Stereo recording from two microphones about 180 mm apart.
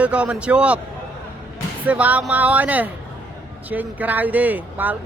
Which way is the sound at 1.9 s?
10° right (ahead or behind).